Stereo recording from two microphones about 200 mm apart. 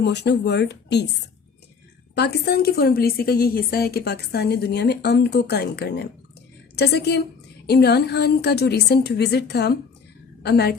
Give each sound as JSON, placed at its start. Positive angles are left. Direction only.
{"t": 0.0, "sound": "a woman's voice", "side_deg": 60}
{"t": 2.1, "sound": "a woman's voice", "side_deg": 55}